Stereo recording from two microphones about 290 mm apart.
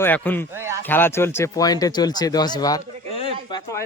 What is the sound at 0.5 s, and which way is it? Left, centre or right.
Speech, centre.